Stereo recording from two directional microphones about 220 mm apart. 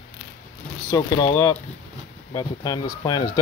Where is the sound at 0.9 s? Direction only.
15° left (ahead or behind).